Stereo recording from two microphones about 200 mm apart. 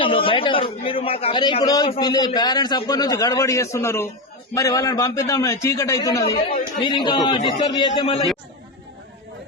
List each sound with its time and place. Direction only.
0.0 s a man's voice: 25° left (ahead or behind)